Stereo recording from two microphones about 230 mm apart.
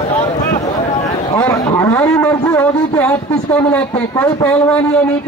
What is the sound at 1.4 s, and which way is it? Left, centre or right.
A man's voice, centre.